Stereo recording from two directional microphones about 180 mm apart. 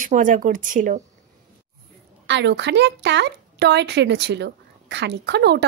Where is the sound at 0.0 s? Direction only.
45° right (ahead or behind).